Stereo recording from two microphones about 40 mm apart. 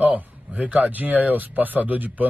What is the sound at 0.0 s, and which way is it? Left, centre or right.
Speech, right.